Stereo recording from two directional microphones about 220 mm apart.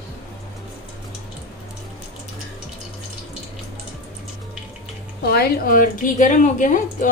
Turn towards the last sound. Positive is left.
turn(degrees=35)  # may be behind; listen again after turning